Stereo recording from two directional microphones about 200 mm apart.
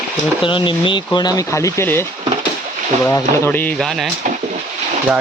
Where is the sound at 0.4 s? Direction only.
25° left (ahead or behind); by 4.1 s centre (ahead or behind).